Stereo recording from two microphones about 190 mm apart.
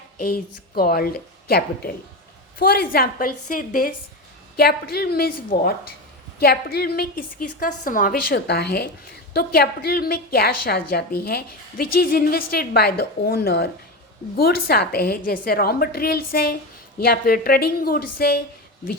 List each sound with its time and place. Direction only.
0.8 s a woman's voice: 55° left (ahead or behind)